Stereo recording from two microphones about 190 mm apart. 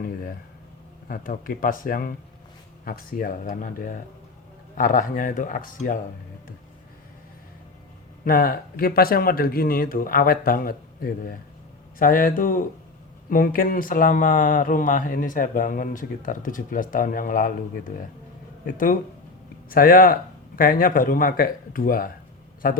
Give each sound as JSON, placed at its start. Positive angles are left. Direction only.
{"t": 1.0, "sound": "speech", "side_deg": 45}
{"t": 8.2, "sound": "speech", "side_deg": 50}